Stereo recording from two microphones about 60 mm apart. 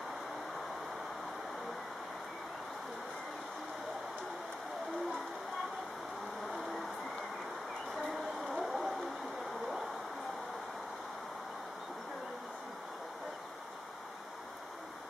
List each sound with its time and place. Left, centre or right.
8.5 s vehicle: centre